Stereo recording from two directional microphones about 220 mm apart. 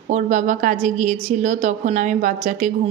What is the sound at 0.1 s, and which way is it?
A woman's voice, 35° right (ahead or behind).